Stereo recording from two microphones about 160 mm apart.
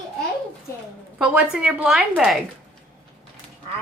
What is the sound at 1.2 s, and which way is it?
A woman's voice, 5° right (ahead or behind).